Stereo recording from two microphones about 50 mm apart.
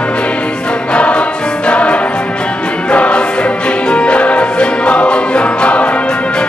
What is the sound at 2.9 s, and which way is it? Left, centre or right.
Music, left.